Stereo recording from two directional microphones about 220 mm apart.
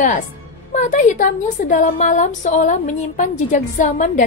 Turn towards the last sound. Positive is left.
turn(degrees=35)  # may be behind; listen again after turning